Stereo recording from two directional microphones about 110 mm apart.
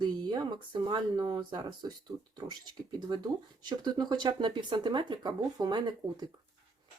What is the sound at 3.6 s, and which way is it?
Speech, 40° right (ahead or behind).